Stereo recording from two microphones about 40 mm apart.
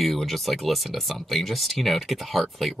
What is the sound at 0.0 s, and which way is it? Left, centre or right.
Speech, centre.